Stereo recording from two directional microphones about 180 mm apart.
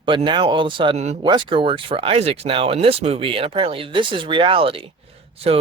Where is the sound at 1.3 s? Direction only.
25° right (ahead or behind).